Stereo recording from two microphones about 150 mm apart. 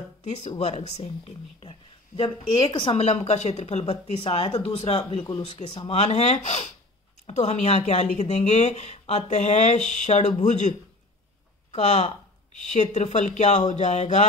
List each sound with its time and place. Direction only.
0.2 s speech: 50° left (ahead or behind)
11.7 s speech: 50° left (ahead or behind)